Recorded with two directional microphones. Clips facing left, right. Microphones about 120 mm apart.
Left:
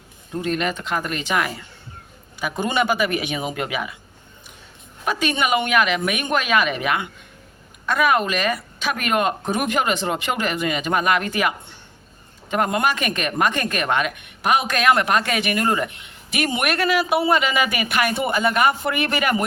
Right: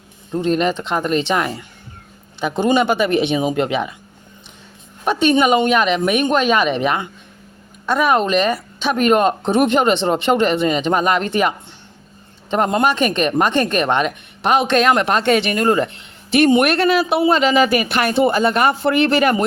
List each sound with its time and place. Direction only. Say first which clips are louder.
0.3 s a woman's voice: right 6 dB; 30° right (ahead or behind)
5.0 s a woman's voice: right 7 dB; 25° right (ahead or behind)